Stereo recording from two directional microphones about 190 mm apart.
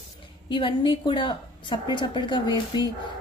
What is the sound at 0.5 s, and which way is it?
Speech, 25° left (ahead or behind).